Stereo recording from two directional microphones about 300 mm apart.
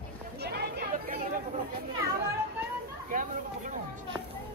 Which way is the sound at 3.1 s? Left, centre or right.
Right.